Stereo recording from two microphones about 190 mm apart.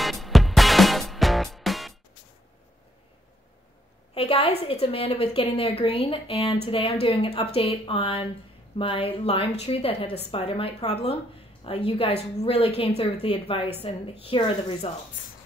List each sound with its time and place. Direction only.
0.0 s music: centre (ahead or behind)
4.1 s a sound: 30° left (ahead or behind)
4.6 s a woman's voice: 30° left (ahead or behind)